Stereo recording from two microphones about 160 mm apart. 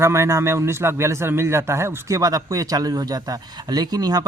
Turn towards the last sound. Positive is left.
turn(degrees=-25)  # may be behind; listen again after turning